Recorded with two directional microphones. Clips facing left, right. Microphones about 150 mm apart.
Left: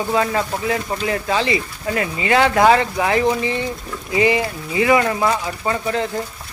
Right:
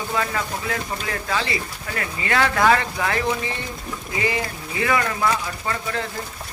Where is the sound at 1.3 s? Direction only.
20° left (ahead or behind).